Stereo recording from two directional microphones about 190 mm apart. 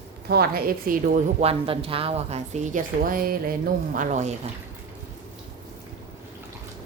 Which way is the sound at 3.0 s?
50° right (ahead or behind).